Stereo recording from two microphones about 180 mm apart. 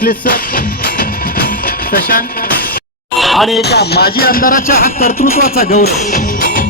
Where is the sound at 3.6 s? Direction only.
65° left (ahead or behind).